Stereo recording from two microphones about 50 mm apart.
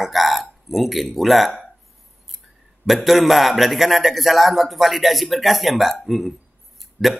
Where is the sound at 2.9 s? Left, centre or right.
Centre.